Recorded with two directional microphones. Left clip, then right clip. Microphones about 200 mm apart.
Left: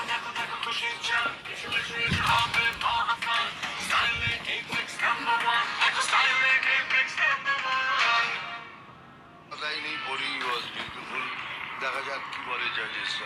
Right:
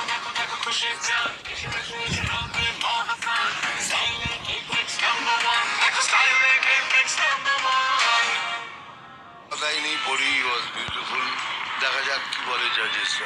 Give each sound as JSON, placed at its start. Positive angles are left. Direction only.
{"t": 0.6, "sound": "music", "side_deg": -35}
{"t": 2.0, "sound": "music", "side_deg": -5}
{"t": 4.9, "sound": "music", "side_deg": -40}
{"t": 6.7, "sound": "music", "side_deg": -55}
{"t": 9.6, "sound": "music", "side_deg": -50}
{"t": 11.8, "sound": "speech", "side_deg": -20}
{"t": 12.5, "sound": "speech", "side_deg": -50}